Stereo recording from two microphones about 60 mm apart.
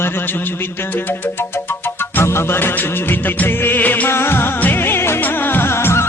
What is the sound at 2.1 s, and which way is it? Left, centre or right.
Music, left.